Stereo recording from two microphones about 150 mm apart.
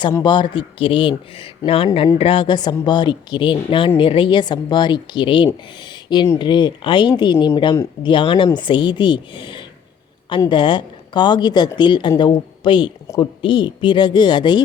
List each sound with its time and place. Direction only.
0.2 s a woman's voice: 30° left (ahead or behind)
5.8 s a sound: 30° left (ahead or behind)
6.4 s a woman's voice: 30° left (ahead or behind)